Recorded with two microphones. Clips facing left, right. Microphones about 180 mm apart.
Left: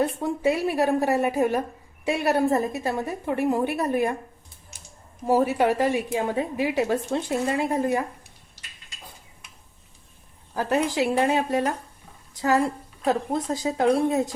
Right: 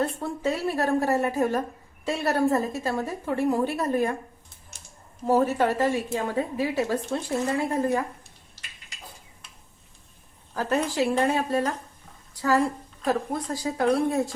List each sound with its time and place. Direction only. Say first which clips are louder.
0.0 s a woman's voice: left 4 dB; 15° left (ahead or behind)
5.2 s a woman's voice: left 1 dB; 10° left (ahead or behind)
10.5 s a woman's voice: left 2 dB; 10° left (ahead or behind)